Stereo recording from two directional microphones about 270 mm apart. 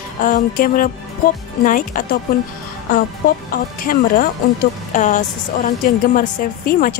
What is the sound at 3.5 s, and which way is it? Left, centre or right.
A woman's voice, left.